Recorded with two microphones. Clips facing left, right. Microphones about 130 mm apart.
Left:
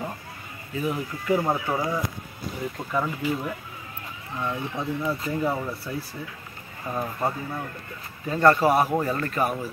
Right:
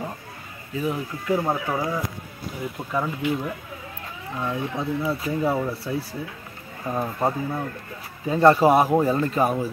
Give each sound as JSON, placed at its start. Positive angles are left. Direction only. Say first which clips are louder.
{"t": 0.7, "sound": "speech", "louder": "right 1 dB", "side_deg": 0}
{"t": 2.9, "sound": "speech", "louder": "right 2 dB", "side_deg": 0}